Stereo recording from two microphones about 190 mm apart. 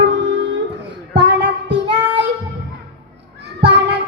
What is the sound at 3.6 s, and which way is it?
Child singing, 65° right (ahead or behind).